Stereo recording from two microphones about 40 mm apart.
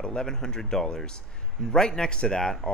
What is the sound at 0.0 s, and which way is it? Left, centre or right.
Speech, centre.